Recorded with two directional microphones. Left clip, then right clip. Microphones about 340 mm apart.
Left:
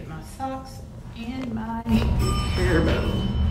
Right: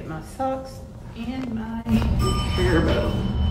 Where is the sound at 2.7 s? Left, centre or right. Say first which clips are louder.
Right 1 dB; centre.